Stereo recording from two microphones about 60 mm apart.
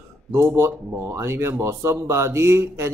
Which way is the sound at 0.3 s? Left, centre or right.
Right.